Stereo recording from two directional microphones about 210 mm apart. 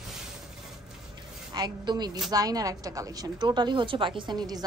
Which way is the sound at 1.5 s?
20° right (ahead or behind).